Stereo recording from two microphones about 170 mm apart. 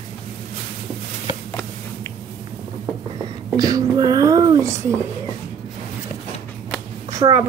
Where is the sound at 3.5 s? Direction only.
20° right (ahead or behind).